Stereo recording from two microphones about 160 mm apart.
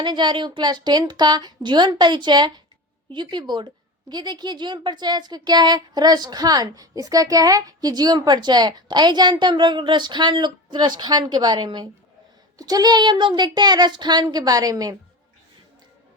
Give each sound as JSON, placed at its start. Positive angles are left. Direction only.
{"t": 0.0, "sound": "a woman's voice", "side_deg": -30}